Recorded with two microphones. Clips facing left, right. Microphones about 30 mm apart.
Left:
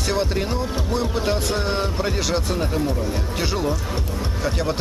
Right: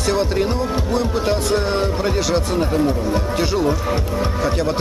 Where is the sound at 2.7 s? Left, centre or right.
Right.